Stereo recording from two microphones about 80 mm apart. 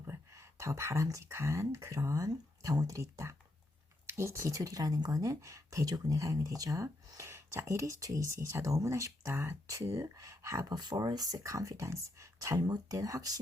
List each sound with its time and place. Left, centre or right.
0.1 s a sound: right
1.2 s speech: right
5.2 s speech: right